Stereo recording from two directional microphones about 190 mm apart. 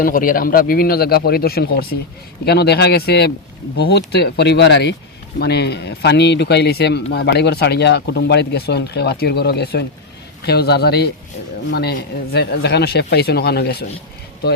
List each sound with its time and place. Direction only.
0.0 s speech: 45° left (ahead or behind)